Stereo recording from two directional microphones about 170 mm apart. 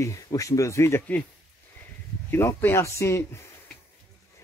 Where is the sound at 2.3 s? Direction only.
15° left (ahead or behind).